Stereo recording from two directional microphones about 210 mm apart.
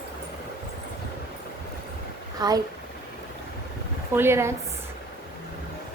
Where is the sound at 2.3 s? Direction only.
20° right (ahead or behind).